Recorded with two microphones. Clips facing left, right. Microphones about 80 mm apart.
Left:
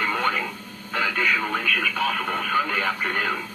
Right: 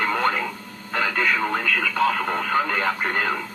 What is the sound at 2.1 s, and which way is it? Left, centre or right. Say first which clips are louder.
Speech: right 2 dB; right.